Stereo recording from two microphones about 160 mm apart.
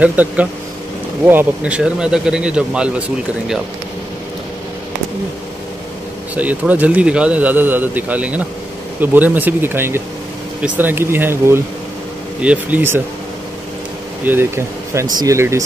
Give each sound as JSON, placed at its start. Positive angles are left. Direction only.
{"t": 0.0, "sound": "speech", "side_deg": -10}
{"t": 6.3, "sound": "speech", "side_deg": -10}
{"t": 14.2, "sound": "speech", "side_deg": -15}